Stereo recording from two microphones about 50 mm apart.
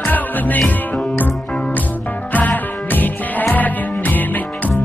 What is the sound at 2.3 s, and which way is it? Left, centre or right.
Music, left.